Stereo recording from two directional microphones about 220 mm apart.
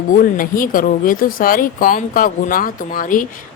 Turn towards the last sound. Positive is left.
turn(degrees=40)  # may be behind; listen again after turning